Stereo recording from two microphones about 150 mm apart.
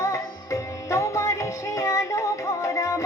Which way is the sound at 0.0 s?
20° left (ahead or behind).